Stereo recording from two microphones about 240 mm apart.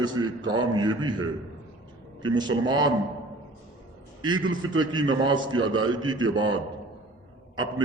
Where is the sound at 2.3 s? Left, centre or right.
Centre.